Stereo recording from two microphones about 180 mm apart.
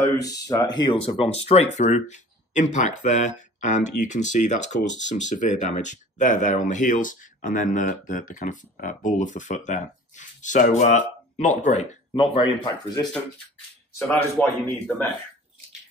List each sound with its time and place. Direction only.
0.7 s speech: 30° left (ahead or behind)
12.1 s speech: 25° left (ahead or behind)
13.9 s speech: 10° left (ahead or behind)